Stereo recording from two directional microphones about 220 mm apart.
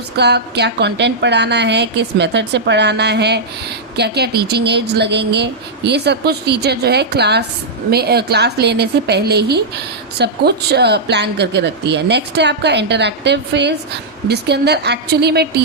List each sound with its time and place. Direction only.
0.2 s a woman's voice: 50° right (ahead or behind)